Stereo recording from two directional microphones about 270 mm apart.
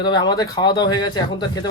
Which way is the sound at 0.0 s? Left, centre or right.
Centre.